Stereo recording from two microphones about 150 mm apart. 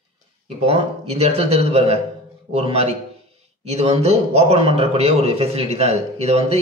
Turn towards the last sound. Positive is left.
turn(degrees=-45)  # may be behind; listen again after turning